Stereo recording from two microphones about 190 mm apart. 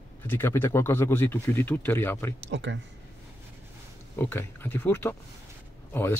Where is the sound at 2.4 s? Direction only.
70° right (ahead or behind).